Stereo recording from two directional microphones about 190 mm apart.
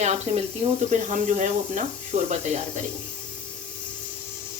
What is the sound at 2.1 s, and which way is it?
Speech, 35° right (ahead or behind).